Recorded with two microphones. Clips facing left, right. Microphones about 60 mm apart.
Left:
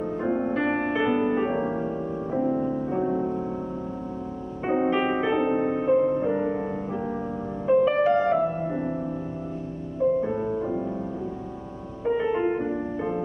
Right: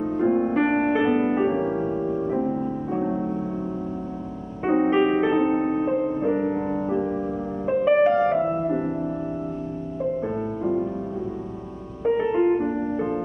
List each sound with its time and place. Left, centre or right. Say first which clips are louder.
0.2 s music: right 6 dB; centre
0.5 s music: right 4 dB; right
1.5 s music: right 3 dB; centre
4.6 s music: right 4 dB; centre
5.9 s music: left 2 dB; centre
7.6 s music: right 1 dB; right
10.2 s music: right 1 dB; centre
12.4 s music: right 4 dB; centre